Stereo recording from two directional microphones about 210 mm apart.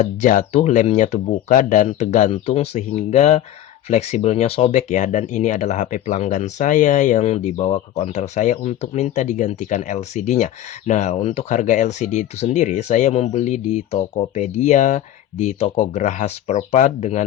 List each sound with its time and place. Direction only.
0.0 s speech: 35° left (ahead or behind)